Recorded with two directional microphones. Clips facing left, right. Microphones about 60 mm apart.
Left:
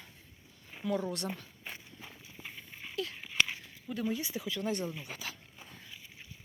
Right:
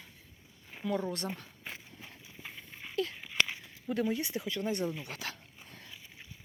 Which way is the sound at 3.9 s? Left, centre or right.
Right.